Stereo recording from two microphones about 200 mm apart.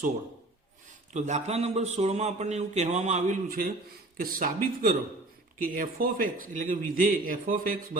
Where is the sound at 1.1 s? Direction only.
35° right (ahead or behind).